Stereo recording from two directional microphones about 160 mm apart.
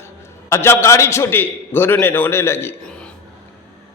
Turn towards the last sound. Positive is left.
turn(degrees=5)  # may be behind; listen again after turning